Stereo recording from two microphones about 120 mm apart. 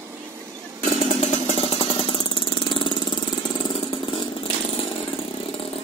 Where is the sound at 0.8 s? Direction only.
80° left.